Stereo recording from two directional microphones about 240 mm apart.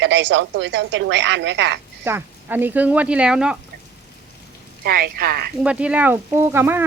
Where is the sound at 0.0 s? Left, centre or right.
Right.